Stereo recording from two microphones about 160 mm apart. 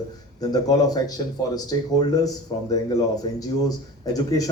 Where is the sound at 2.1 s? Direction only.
25° left (ahead or behind).